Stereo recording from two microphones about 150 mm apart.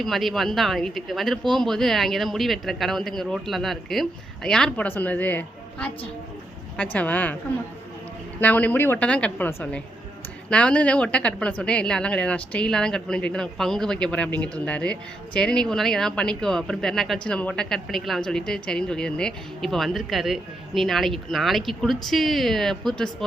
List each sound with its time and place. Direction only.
0.0 s a woman's voice: centre (ahead or behind)
6.9 s a woman's voice: 10° left (ahead or behind)
8.4 s a woman's voice: 10° left (ahead or behind)